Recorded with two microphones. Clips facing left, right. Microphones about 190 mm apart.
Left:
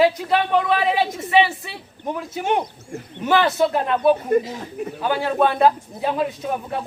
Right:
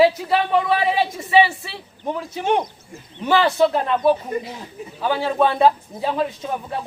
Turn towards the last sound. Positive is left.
turn(degrees=5)  # may be behind; listen again after turning